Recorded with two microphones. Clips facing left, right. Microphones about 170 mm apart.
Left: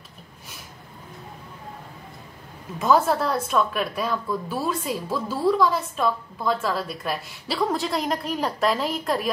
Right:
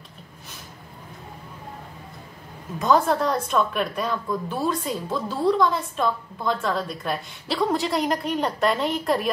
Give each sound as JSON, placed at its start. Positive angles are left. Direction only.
{"t": 2.8, "sound": "a woman's voice", "side_deg": 5}